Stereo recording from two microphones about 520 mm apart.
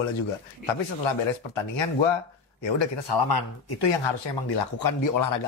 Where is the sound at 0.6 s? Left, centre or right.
Left.